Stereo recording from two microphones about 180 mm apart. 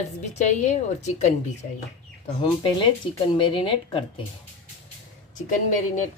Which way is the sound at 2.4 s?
25° left (ahead or behind).